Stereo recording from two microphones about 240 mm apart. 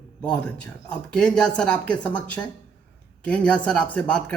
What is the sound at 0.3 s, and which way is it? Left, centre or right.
Speech, centre.